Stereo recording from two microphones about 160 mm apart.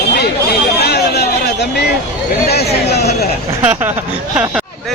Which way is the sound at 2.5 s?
90° left.